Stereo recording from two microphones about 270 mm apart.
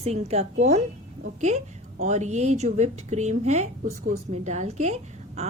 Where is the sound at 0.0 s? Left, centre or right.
Right.